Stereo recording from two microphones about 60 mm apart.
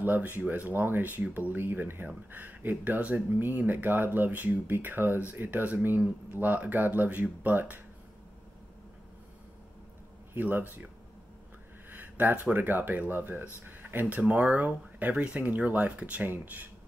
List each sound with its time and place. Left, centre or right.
0.0 s speech: right
10.3 s speech: right
11.9 s a sound: right
12.5 s speech: right